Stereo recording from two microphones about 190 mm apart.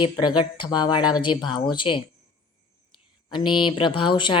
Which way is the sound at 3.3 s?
25° left (ahead or behind).